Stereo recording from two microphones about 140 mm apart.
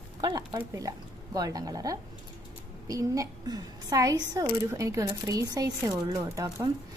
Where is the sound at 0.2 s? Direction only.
30° right (ahead or behind).